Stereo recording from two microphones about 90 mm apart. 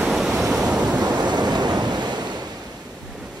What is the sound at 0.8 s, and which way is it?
Waves, 50° right (ahead or behind).